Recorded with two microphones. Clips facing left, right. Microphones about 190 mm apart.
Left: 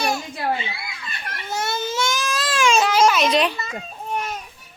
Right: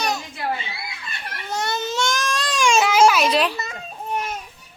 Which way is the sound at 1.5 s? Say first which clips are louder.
Even; 5° left (ahead or behind).